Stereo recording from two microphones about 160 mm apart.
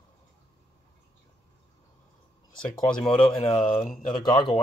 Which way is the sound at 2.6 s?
5° left (ahead or behind).